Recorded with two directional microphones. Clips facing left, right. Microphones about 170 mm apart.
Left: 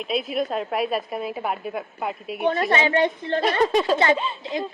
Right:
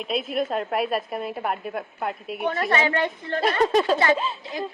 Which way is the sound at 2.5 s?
20° left (ahead or behind).